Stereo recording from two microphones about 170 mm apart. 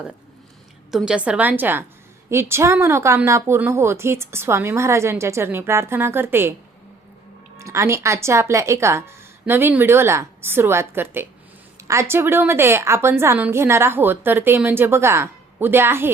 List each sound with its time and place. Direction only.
0.9 s a woman's voice: 5° right (ahead or behind)
7.6 s a woman's voice: 15° right (ahead or behind)